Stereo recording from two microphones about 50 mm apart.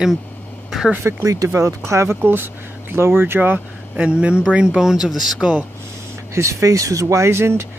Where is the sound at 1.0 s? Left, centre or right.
Right.